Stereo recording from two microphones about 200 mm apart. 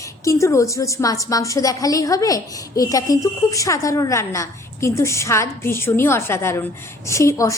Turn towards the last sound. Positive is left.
turn(degrees=15)  # may be behind; listen again after turning